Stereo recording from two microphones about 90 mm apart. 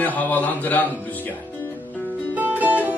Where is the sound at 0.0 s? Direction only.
20° left (ahead or behind).